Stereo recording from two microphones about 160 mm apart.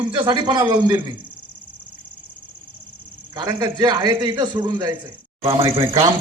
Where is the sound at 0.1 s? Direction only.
30° right (ahead or behind).